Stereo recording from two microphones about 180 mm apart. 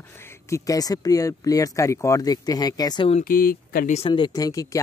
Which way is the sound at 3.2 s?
55° left (ahead or behind).